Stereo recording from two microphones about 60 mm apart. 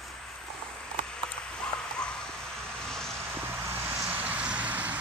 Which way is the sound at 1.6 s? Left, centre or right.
Centre.